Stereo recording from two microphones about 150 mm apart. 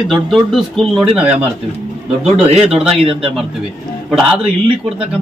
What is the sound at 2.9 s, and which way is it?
Speech, 40° right (ahead or behind).